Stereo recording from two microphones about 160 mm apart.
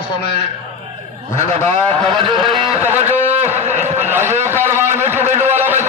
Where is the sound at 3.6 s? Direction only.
45° right (ahead or behind).